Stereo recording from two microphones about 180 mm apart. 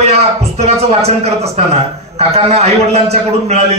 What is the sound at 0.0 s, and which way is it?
A man's voice, 35° right (ahead or behind).